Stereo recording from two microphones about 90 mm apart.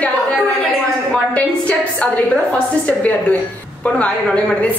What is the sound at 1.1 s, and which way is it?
A woman's voice, 15° left (ahead or behind).